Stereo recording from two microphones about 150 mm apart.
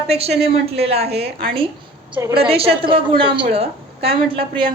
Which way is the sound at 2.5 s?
40° right (ahead or behind).